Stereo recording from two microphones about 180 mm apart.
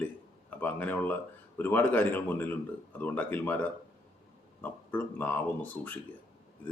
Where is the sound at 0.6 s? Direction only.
10° left (ahead or behind).